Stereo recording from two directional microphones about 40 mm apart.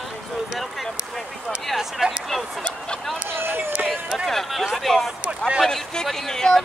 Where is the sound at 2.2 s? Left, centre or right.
Centre.